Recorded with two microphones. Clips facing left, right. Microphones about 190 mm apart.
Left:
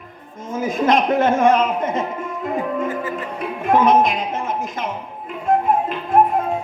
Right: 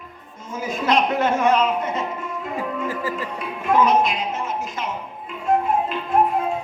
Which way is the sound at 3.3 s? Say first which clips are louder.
Left 2 dB; 50° left (ahead or behind).